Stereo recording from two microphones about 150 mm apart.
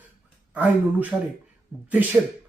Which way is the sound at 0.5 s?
10° right (ahead or behind).